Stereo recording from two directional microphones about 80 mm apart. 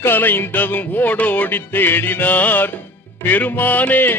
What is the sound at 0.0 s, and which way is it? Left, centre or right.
Music, left.